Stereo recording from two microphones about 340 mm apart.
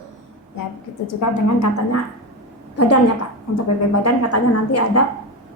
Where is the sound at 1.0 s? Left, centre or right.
Left.